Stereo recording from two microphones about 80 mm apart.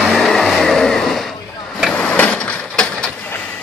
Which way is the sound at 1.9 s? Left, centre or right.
Centre.